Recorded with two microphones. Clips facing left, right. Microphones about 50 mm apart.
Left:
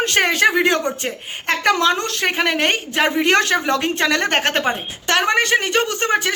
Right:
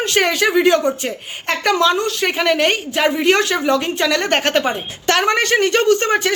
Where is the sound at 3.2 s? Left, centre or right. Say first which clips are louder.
Right 1 dB; left.